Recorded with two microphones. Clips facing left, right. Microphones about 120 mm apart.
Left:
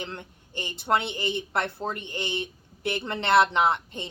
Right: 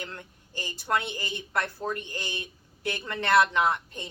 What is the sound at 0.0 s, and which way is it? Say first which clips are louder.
A woman's voice: left 3 dB; 20° left (ahead or behind).